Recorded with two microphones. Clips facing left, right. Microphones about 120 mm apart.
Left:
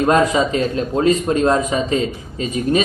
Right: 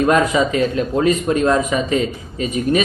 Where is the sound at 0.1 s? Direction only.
35° left (ahead or behind).